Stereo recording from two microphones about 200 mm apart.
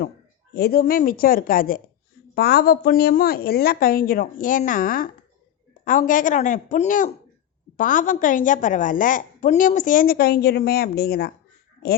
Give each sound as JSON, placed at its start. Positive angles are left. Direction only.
{"t": 0.5, "sound": "a woman's voice", "side_deg": 50}